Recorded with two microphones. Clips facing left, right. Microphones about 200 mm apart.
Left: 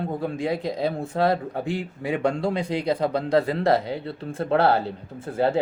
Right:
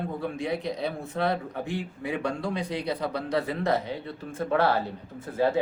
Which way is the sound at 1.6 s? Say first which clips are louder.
Left 4 dB; 90° left.